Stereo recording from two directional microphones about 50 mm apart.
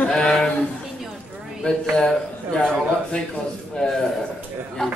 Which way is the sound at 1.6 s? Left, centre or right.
Centre.